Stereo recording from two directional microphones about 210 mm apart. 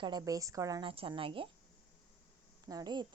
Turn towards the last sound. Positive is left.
turn(degrees=-20)  # may be behind; listen again after turning